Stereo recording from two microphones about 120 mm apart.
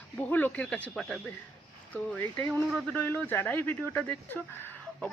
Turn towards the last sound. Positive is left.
turn(degrees=15)  # may be behind; listen again after turning